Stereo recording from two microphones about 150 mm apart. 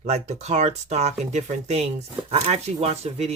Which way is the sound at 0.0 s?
45° right (ahead or behind).